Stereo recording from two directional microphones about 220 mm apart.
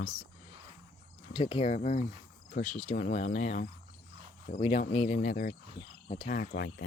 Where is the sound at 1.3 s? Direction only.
25° left (ahead or behind).